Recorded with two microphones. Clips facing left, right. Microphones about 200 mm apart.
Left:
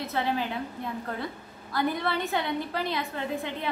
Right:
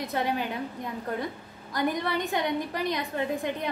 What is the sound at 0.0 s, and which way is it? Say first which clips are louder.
A woman's voice: even; 15° right (ahead or behind).